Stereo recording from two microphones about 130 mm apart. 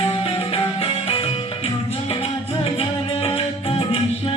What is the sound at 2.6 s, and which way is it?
Music, 45° left (ahead or behind).